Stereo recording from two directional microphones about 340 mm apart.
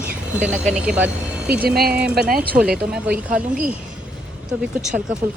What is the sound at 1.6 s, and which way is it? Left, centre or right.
Speech, right.